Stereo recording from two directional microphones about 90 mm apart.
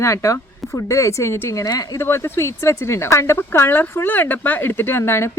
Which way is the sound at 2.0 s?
30° left (ahead or behind).